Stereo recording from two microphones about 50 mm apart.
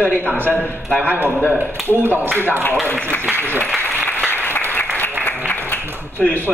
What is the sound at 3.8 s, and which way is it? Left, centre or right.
Applause, left.